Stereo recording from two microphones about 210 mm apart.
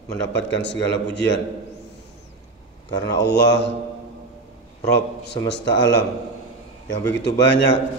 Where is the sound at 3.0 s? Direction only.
55° left (ahead or behind).